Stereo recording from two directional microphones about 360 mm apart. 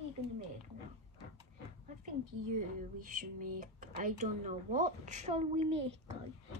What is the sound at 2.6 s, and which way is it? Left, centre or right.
Speech, right.